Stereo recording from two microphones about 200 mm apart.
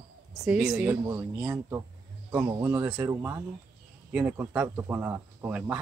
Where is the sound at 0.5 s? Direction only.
5° right (ahead or behind).